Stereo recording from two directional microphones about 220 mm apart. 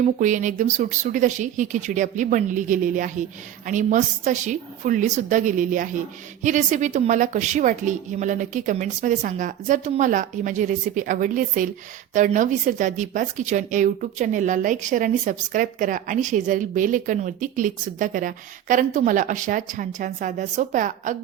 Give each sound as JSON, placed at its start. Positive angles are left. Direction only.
{"t": 0.0, "sound": "speech", "side_deg": -35}